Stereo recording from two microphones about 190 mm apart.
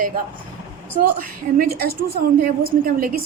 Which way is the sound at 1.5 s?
50° right (ahead or behind).